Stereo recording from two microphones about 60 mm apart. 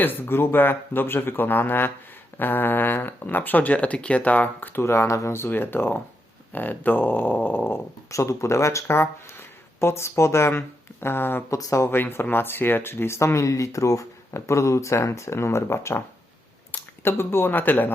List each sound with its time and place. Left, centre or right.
0.0 s speech: left
4.8 s speech: left
5.5 s speech: left
8.1 s speech: left
11.0 s speech: left
11.5 s speech: left
11.9 s speech: left